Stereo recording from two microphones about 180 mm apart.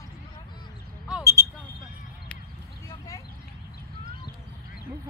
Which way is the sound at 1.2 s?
20° right (ahead or behind).